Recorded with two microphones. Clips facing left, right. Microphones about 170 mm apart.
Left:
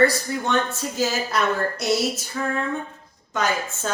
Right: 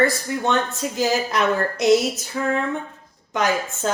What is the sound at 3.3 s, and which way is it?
Speech, 15° right (ahead or behind).